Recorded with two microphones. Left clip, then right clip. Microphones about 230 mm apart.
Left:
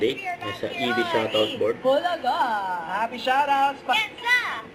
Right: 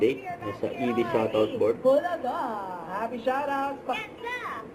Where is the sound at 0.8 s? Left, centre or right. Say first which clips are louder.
Left 3 dB; centre.